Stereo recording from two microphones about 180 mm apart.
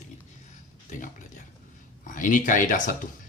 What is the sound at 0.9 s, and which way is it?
Speech, 45° left (ahead or behind).